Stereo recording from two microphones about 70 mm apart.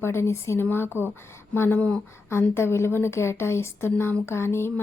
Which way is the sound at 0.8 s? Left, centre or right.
Right.